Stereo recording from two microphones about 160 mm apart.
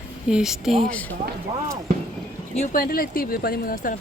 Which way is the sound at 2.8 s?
65° left (ahead or behind).